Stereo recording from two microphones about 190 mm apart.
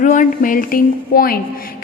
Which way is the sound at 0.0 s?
45° left (ahead or behind).